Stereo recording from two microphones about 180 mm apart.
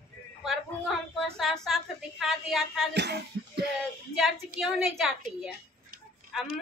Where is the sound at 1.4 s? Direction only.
Centre (ahead or behind).